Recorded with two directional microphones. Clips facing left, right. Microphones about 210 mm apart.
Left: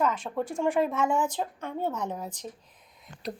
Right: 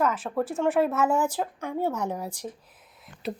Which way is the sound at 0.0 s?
5° right (ahead or behind).